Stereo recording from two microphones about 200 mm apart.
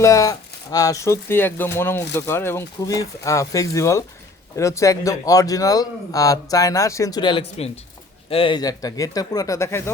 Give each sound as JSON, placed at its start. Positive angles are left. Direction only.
{"t": 0.0, "sound": "speech", "side_deg": 15}